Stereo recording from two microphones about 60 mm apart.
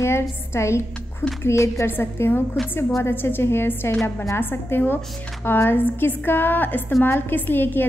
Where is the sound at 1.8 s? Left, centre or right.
Left.